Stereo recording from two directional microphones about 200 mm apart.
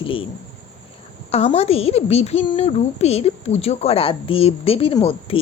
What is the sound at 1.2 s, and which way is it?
A woman's voice, 30° left (ahead or behind).